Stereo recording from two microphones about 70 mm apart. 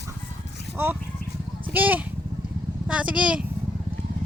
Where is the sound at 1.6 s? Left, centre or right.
Right.